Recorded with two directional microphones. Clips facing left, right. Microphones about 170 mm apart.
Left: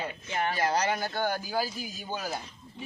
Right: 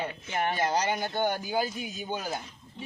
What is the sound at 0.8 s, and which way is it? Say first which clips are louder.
Speech: even; centre (ahead or behind).